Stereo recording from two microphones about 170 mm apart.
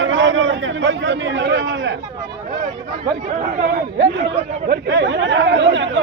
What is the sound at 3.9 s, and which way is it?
Speech, 90° right.